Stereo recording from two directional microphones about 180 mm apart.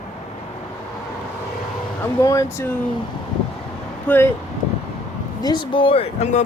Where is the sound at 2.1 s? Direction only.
15° left (ahead or behind).